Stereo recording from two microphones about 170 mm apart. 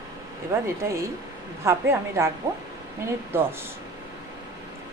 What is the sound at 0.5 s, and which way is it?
A woman's voice, 15° right (ahead or behind).